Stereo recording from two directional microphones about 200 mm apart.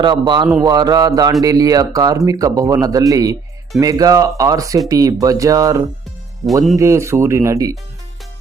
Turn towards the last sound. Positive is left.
turn(degrees=-15)  # may be behind; listen again after turning